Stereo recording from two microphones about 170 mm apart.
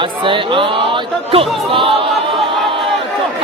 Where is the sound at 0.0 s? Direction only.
30° right (ahead or behind).